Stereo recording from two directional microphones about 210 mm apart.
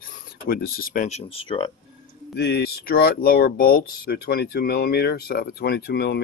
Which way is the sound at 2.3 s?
55° left (ahead or behind).